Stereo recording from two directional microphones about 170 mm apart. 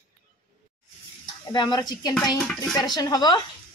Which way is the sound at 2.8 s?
25° left (ahead or behind).